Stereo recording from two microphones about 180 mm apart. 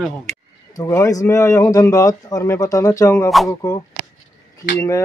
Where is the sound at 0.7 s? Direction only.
15° left (ahead or behind).